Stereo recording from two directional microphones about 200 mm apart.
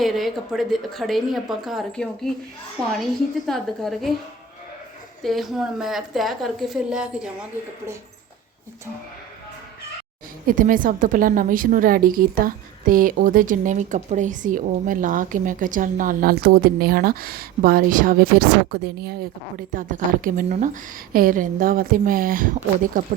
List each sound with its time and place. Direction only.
0.0 s a woman's voice: centre (ahead or behind)
3.4 s a woman's voice: centre (ahead or behind)
5.2 s a woman's voice: centre (ahead or behind)
10.4 s a woman's voice: 45° right (ahead or behind)